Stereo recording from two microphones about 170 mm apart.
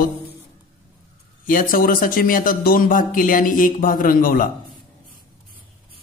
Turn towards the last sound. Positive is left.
turn(degrees=55)  # may be behind; listen again after turning